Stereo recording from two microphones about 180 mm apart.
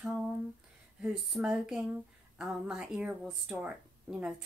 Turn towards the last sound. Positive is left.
turn(degrees=-5)  # may be behind; listen again after turning